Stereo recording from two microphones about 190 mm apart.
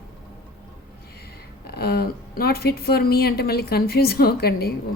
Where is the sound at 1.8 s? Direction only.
55° left (ahead or behind).